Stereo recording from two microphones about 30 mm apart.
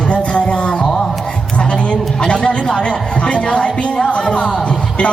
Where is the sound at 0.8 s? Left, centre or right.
Left.